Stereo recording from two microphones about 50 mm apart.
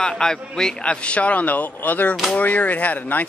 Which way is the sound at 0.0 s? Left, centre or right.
Centre.